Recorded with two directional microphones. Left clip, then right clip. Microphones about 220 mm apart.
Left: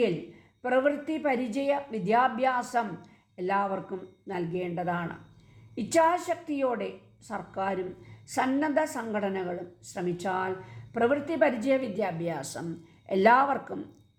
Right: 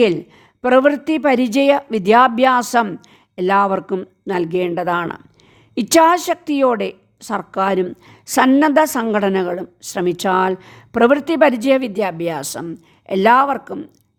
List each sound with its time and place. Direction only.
0.6 s a woman's voice: 45° right (ahead or behind)